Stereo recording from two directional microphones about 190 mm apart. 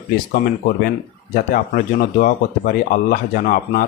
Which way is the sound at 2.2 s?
45° left (ahead or behind).